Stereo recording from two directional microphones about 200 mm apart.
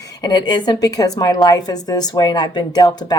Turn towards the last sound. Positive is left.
turn(degrees=20)  # may be behind; listen again after turning